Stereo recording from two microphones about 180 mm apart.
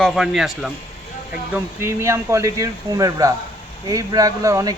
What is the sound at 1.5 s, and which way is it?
Speech, 15° right (ahead or behind).